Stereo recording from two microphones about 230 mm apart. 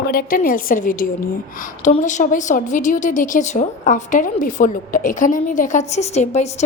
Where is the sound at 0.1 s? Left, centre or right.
Left.